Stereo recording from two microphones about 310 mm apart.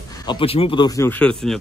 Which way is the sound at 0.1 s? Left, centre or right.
Centre.